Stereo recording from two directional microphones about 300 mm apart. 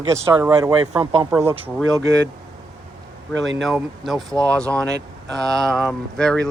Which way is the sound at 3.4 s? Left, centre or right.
Right.